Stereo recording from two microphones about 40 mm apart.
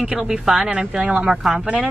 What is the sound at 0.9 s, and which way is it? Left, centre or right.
Speech, right.